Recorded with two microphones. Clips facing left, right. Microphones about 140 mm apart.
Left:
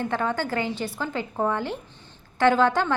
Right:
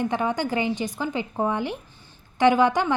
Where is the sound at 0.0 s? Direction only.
15° right (ahead or behind).